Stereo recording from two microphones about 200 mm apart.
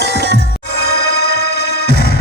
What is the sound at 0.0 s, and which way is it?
Music, 55° left (ahead or behind).